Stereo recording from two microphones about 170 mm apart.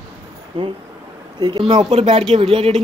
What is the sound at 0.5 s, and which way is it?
Speech, 35° right (ahead or behind).